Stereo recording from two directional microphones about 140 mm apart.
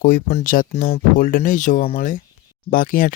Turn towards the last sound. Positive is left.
turn(degrees=85)